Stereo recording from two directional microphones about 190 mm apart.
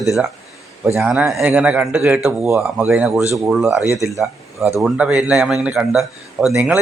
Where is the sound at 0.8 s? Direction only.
15° right (ahead or behind).